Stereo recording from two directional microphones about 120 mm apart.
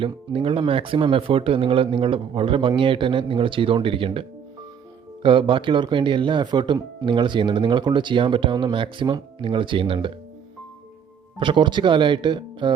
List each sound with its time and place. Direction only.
0.3 s speech: 50° right (ahead or behind)
11.3 s speech: 40° right (ahead or behind)